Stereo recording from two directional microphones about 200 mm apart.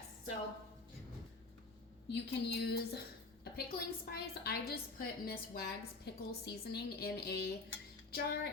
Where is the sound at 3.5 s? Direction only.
55° left (ahead or behind).